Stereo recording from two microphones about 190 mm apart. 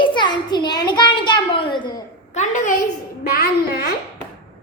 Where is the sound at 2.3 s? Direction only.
40° left (ahead or behind).